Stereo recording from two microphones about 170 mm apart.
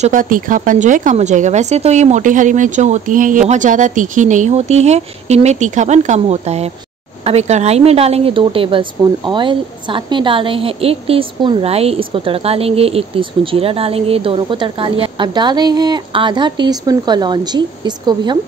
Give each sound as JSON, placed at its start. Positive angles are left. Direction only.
{"t": 0.0, "sound": "a woman's voice", "side_deg": -50}